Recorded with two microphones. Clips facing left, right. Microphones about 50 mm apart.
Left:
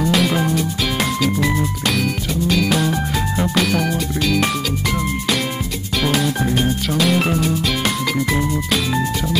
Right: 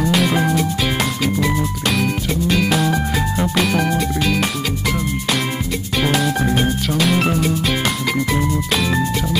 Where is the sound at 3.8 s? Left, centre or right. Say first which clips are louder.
Right 2 dB; centre.